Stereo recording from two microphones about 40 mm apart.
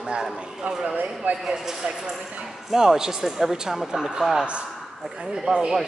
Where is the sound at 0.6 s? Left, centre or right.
Right.